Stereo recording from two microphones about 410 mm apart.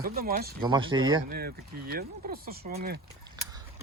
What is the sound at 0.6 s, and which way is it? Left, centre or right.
Speech, centre.